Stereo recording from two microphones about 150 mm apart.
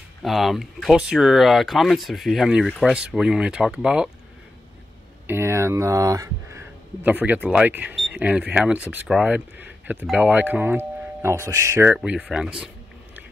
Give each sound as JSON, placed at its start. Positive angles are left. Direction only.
{"t": 0.2, "sound": "speech", "side_deg": 0}
{"t": 5.2, "sound": "speech", "side_deg": -15}
{"t": 12.0, "sound": "speech", "side_deg": -5}